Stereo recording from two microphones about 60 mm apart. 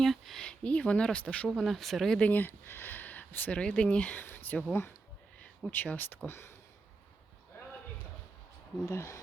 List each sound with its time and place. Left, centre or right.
0.0 s speech: centre
0.4 s speech: centre
1.5 s speech: centre
2.1 s speech: left
4.1 s speech: left
5.7 s speech: left
6.2 s speech: left
8.9 s speech: left